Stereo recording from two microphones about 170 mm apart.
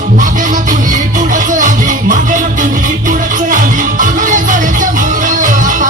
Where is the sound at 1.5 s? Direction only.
50° right (ahead or behind).